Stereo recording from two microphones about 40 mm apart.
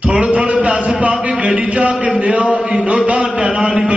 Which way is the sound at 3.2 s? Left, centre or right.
Right.